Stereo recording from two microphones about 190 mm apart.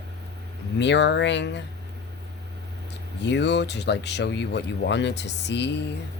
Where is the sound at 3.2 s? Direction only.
65° left (ahead or behind).